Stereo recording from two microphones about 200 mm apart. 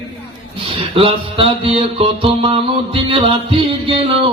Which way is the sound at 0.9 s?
25° right (ahead or behind).